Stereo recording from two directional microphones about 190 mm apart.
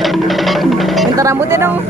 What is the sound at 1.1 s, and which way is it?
Speech, 15° right (ahead or behind).